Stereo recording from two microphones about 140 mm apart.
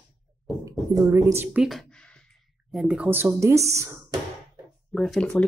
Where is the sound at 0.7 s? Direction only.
25° right (ahead or behind).